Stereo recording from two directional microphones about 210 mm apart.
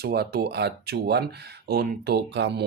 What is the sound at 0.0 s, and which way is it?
Speech, 45° right (ahead or behind).